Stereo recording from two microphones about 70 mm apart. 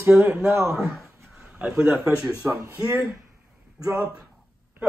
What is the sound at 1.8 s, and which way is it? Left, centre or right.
Speech, centre.